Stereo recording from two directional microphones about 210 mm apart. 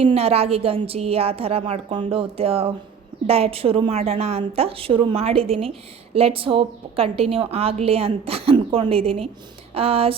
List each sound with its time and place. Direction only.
0.0 s a woman's voice: 30° right (ahead or behind)